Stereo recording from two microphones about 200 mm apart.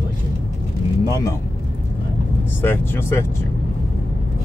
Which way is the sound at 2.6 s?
10° left (ahead or behind).